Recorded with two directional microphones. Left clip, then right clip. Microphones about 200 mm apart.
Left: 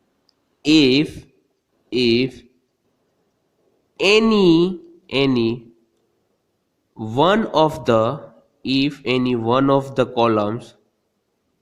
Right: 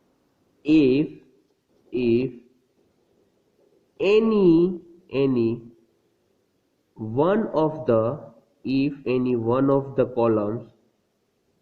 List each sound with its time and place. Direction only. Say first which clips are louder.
0.6 s a man's voice: left 4 dB; 40° left (ahead or behind)
4.1 s speech: left 3 dB; 45° left (ahead or behind)
7.0 s a man's voice: left 5 dB; 40° left (ahead or behind)